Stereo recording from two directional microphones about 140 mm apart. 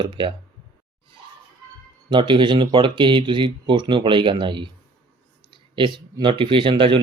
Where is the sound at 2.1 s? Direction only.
35° right (ahead or behind).